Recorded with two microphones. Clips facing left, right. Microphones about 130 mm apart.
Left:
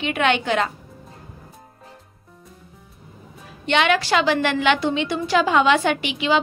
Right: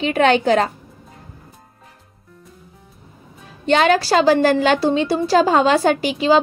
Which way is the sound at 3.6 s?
40° right (ahead or behind).